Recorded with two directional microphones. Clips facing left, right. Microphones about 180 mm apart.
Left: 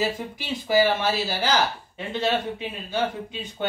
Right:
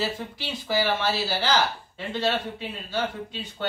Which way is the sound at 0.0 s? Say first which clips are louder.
Left 3 dB; 15° left (ahead or behind).